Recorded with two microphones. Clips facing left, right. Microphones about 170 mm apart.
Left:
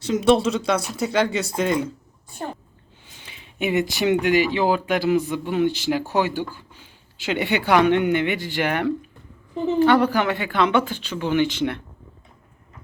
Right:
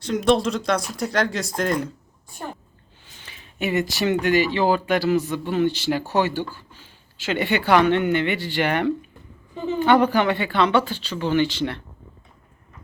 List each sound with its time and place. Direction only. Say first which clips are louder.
0.0 s speech: left 2 dB; 5° left (ahead or behind)
3.2 s a sound: left 1 dB; 15° left (ahead or behind)
4.0 s speech: left 1 dB; 15° left (ahead or behind)